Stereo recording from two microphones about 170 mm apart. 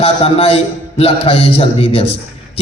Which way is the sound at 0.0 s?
35° left (ahead or behind).